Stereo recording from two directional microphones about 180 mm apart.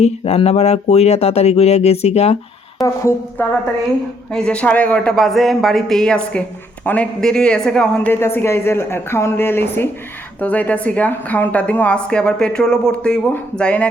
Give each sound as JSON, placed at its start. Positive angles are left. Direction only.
{"t": 0.0, "sound": "speech", "side_deg": 35}
{"t": 2.8, "sound": "a woman's voice", "side_deg": 15}
{"t": 4.3, "sound": "a woman's voice", "side_deg": 5}